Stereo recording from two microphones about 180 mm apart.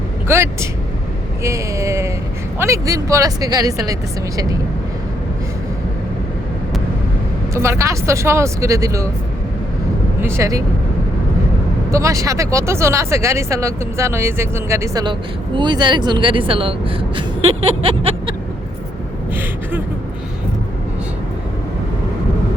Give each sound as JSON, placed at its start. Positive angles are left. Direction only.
{"t": 0.3, "sound": "speech", "side_deg": -15}
{"t": 7.5, "sound": "speech", "side_deg": -15}
{"t": 10.2, "sound": "speech", "side_deg": -15}
{"t": 11.9, "sound": "speech", "side_deg": -15}